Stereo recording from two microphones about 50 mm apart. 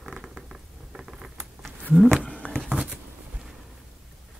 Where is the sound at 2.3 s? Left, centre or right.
Left.